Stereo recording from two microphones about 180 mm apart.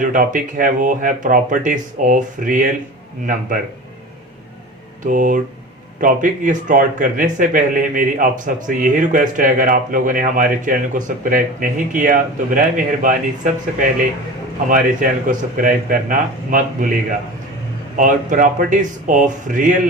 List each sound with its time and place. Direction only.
0.0 s speech: 50° right (ahead or behind)
5.0 s speech: 45° right (ahead or behind)
17.9 s speech: 45° right (ahead or behind)